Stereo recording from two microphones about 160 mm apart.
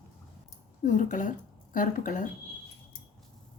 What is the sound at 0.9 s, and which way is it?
A woman's voice, 55° left (ahead or behind).